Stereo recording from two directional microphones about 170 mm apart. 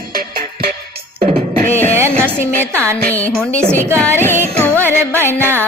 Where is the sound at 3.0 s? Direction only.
10° left (ahead or behind).